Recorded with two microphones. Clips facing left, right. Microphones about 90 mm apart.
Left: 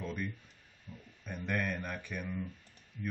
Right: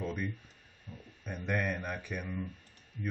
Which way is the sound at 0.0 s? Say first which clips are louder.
Right 2 dB; 10° right (ahead or behind).